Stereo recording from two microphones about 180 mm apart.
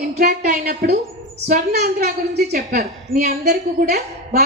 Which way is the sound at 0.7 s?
55° right (ahead or behind).